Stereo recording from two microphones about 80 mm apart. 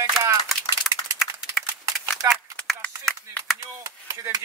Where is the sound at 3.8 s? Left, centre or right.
Right.